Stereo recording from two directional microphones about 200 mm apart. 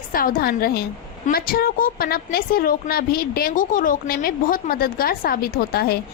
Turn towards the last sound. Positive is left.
turn(degrees=50)  # may be behind; listen again after turning